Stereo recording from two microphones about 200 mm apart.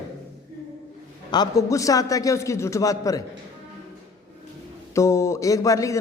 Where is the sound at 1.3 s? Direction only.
20° left (ahead or behind).